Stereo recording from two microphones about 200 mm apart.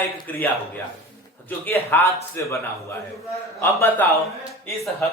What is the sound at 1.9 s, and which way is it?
Speech, 10° left (ahead or behind).